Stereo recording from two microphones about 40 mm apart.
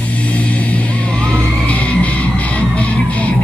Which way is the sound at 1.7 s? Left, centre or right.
Left.